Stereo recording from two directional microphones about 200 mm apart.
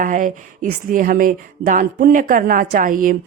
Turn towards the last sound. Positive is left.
turn(degrees=-45)  # may be behind; listen again after turning